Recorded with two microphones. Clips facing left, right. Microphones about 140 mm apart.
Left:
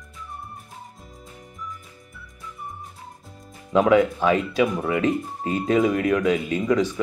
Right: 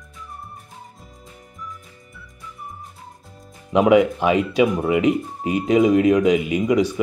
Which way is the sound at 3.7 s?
15° right (ahead or behind).